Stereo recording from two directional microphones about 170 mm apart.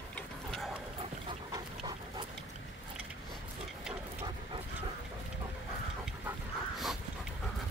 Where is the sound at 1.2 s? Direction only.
25° right (ahead or behind).